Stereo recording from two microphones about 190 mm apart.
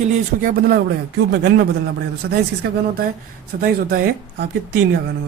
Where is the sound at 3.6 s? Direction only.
50° right (ahead or behind).